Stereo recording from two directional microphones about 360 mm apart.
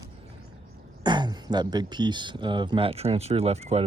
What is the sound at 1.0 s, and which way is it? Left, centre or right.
Speech, centre.